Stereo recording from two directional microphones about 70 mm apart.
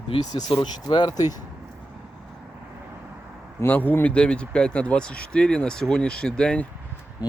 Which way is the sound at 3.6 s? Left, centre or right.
Left.